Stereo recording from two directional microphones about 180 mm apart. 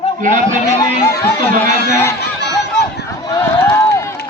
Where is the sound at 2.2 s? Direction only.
70° left (ahead or behind).